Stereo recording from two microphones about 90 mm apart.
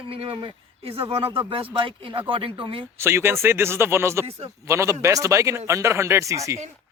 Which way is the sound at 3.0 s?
25° right (ahead or behind).